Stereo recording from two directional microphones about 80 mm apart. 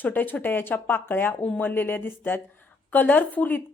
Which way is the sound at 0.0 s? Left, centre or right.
Left.